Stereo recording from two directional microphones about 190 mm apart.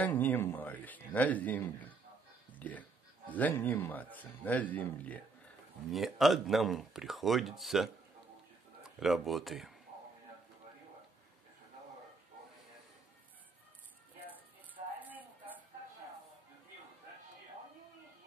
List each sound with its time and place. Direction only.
0.0 s speech: 10° left (ahead or behind)
3.3 s speech: 10° left (ahead or behind)
15.0 s a sound: 10° right (ahead or behind)